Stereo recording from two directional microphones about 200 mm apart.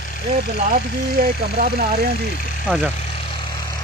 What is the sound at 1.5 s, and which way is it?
Speech, 45° right (ahead or behind).